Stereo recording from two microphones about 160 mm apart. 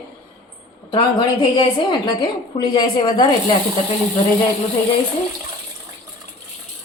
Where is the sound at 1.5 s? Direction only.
30° left (ahead or behind).